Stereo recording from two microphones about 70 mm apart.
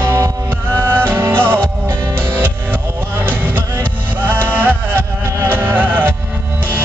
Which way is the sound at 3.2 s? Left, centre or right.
Right.